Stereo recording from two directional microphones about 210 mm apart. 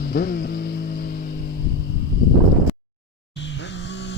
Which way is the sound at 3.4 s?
55° left (ahead or behind).